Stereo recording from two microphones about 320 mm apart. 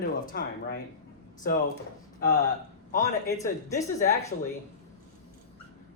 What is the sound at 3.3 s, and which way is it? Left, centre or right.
Speech, centre.